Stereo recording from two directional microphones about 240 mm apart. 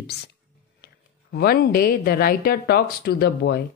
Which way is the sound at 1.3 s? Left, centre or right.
Left.